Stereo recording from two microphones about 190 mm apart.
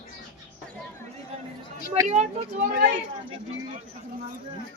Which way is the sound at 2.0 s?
35° right (ahead or behind).